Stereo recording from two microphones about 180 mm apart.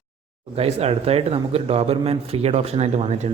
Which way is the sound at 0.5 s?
35° right (ahead or behind).